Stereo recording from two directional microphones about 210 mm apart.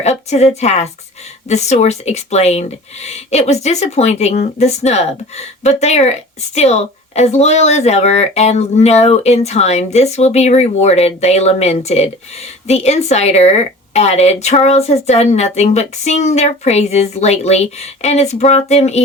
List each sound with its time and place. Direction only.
0.0 s speech: 30° left (ahead or behind)